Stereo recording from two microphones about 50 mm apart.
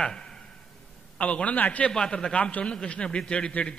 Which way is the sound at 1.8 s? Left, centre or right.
Centre.